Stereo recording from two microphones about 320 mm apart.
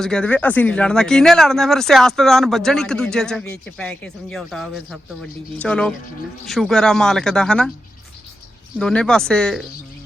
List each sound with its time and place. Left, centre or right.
0.0 s speech: centre
8.8 s speech: centre